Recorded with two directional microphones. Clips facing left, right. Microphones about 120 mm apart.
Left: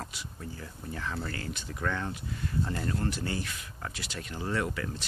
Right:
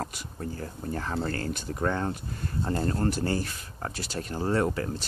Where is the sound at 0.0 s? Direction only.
45° right (ahead or behind).